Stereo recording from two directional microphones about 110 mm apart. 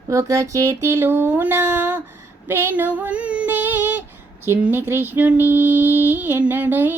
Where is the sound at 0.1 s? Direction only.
30° right (ahead or behind).